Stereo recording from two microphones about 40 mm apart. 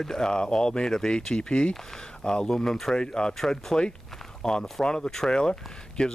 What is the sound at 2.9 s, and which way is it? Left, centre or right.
Speech, left.